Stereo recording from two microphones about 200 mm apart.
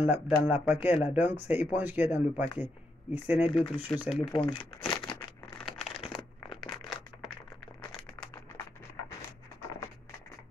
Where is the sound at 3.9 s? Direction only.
5° right (ahead or behind).